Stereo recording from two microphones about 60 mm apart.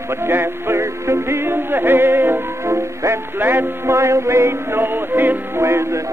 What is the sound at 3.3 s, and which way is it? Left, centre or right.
Music, right.